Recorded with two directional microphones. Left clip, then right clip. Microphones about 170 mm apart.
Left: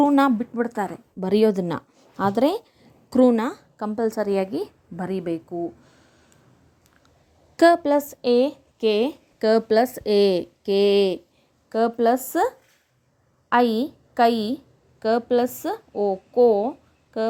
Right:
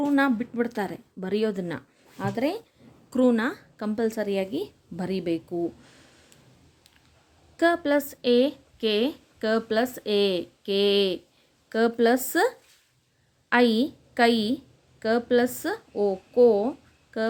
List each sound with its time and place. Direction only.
0.0 s speech: 30° left (ahead or behind)
0.5 s speech: 5° left (ahead or behind)
1.2 s speech: 35° left (ahead or behind)
3.1 s a woman's voice: 30° left (ahead or behind); by 4.2 s 15° left (ahead or behind)
4.2 s speech: centre (ahead or behind)
7.5 s a sound: 45° left (ahead or behind)
7.8 s speech: 20° left (ahead or behind)
9.4 s speech: 35° left (ahead or behind)
11.7 s a woman's voice: 5° left (ahead or behind)